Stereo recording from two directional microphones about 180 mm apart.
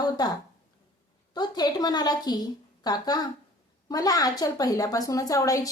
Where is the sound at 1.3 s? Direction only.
25° left (ahead or behind).